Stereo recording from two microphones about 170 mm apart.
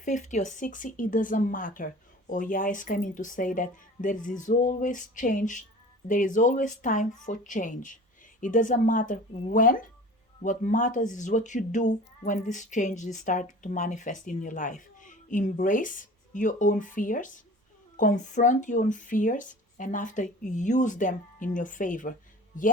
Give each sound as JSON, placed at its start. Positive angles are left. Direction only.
{"t": 0.0, "sound": "speech", "side_deg": 45}